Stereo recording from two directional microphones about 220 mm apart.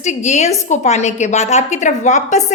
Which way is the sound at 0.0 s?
30° left (ahead or behind).